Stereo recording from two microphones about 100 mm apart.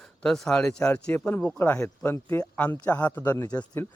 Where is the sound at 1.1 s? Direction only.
20° left (ahead or behind).